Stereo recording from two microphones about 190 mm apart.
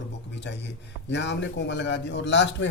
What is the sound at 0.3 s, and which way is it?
A man's voice, 70° left (ahead or behind).